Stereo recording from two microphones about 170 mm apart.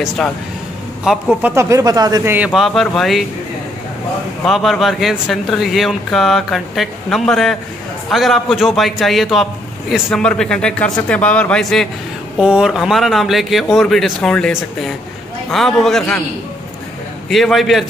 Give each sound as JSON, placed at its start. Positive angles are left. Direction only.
{"t": 1.1, "sound": "speech", "side_deg": -5}
{"t": 1.5, "sound": "speech", "side_deg": -15}
{"t": 2.3, "sound": "speech", "side_deg": -5}
{"t": 4.5, "sound": "speech", "side_deg": 0}
{"t": 17.3, "sound": "speech", "side_deg": 0}